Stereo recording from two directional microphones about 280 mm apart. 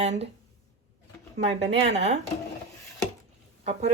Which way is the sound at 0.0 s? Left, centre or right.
Right.